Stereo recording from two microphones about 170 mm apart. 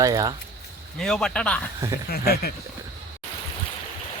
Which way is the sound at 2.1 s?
65° left (ahead or behind).